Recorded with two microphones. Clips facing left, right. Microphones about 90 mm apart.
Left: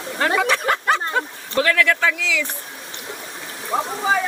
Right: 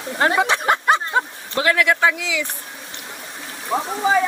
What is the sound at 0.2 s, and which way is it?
Speech, 25° right (ahead or behind).